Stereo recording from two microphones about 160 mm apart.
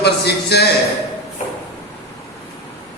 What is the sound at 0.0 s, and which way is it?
Speech, 90° left.